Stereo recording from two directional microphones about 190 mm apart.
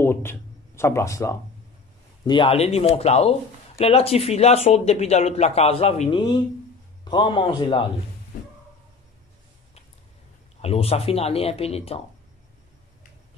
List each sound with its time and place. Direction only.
0.0 s speech: 10° left (ahead or behind)
2.2 s a man's voice: 25° left (ahead or behind)
10.6 s speech: 30° left (ahead or behind)